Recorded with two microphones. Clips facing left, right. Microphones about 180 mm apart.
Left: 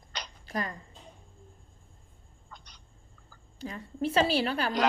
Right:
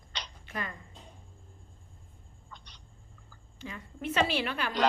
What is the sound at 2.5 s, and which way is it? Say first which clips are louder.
Frog: even; 45° left (ahead or behind).